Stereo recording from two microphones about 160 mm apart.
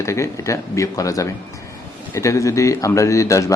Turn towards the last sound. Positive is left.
turn(degrees=20)  # may be behind; listen again after turning